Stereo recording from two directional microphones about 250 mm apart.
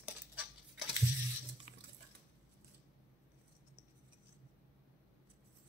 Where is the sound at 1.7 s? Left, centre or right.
Right.